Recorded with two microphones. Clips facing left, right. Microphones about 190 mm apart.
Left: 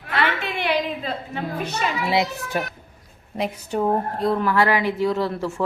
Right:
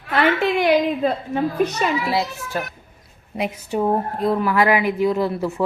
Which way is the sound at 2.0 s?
20° left (ahead or behind).